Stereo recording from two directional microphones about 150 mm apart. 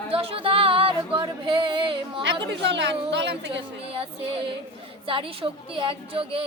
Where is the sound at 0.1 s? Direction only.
40° right (ahead or behind).